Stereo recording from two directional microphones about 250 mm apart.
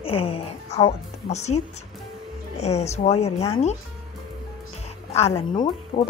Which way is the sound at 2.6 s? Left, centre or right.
Left.